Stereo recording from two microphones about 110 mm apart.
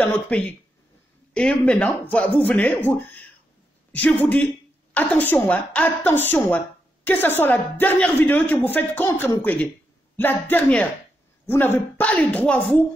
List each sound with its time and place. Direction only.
0.0 s speech: 15° left (ahead or behind)